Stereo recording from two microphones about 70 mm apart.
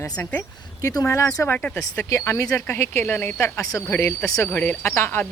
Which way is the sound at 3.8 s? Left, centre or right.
Left.